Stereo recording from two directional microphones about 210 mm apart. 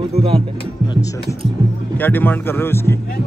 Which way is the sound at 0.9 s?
15° left (ahead or behind).